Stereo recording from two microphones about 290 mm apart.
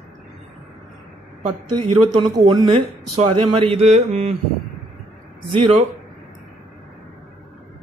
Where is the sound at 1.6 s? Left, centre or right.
Right.